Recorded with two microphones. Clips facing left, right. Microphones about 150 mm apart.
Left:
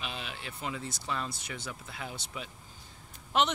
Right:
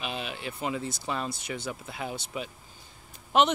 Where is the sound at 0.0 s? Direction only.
10° right (ahead or behind).